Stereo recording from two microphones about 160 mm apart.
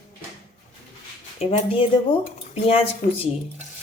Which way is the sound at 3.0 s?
55° left (ahead or behind).